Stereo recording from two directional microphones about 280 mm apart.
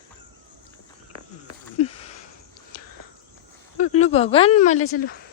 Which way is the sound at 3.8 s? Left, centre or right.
Left.